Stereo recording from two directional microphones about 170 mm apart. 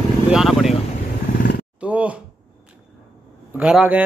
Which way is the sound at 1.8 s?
10° right (ahead or behind).